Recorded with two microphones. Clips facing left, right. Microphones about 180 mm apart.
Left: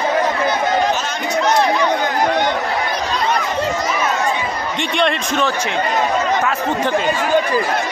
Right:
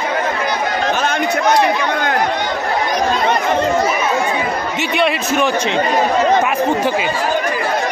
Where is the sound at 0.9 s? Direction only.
55° right (ahead or behind).